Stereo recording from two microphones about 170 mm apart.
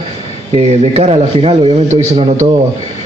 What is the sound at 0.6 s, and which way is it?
A man's voice, 40° right (ahead or behind).